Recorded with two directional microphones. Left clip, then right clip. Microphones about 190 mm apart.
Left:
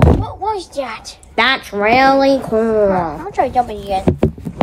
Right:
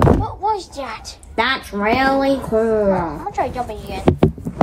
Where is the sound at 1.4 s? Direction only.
50° left (ahead or behind).